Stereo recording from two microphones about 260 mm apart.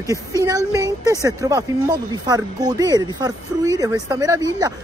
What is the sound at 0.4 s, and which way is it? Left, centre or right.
A woman's voice, centre.